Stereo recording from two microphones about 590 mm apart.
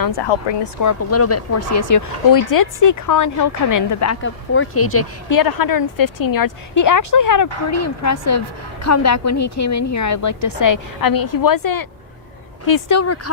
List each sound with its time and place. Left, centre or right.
0.0 s speech: left
0.9 s a woman's voice: left
5.4 s a woman's voice: left